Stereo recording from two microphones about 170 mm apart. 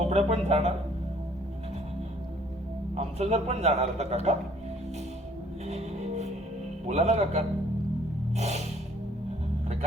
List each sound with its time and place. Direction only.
0.0 s speech: 40° right (ahead or behind)
2.9 s a man's voice: 40° right (ahead or behind)
5.6 s music: 40° right (ahead or behind)
6.8 s a man's voice: 40° right (ahead or behind)